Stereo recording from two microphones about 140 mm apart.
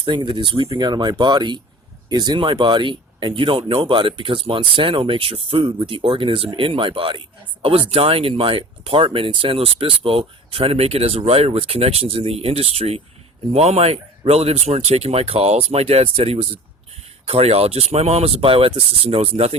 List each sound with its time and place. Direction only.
0.0 s speech: 35° right (ahead or behind)